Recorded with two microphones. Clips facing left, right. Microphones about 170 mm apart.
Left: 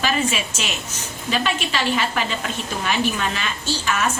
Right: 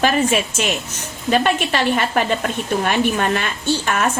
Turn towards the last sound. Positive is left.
turn(degrees=-55)  # may be behind; listen again after turning